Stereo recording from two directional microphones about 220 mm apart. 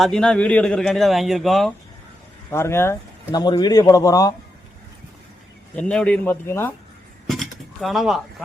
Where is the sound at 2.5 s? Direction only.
10° left (ahead or behind).